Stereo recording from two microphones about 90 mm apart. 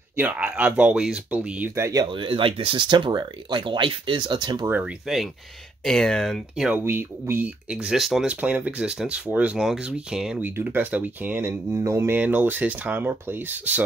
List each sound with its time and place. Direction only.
0.4 s speech: 15° right (ahead or behind)
1.8 s speech: 40° right (ahead or behind)
2.1 s speech: 80° right; by 4.6 s 55° right (ahead or behind)
4.6 s speech: 20° right (ahead or behind)
5.0 s speech: 5° right (ahead or behind)
5.9 s speech: 5° left (ahead or behind)
6.8 s speech: 25° right (ahead or behind)
7.7 s speech: 5° right (ahead or behind)
8.3 s speech: 15° right (ahead or behind)
10.4 s speech: 20° right (ahead or behind)
11.7 s speech: 35° right (ahead or behind)
12.2 s speech: 20° right (ahead or behind)